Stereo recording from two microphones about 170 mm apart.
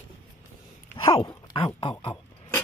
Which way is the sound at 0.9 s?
30° left (ahead or behind).